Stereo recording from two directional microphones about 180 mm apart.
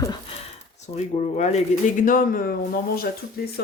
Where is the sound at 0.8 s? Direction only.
40° left (ahead or behind); by 3.5 s 60° left (ahead or behind).